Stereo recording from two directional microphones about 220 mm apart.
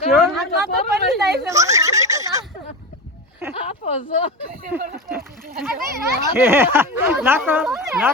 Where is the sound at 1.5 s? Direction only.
15° right (ahead or behind).